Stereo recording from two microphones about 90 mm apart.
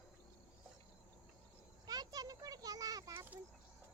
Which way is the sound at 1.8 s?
50° right (ahead or behind).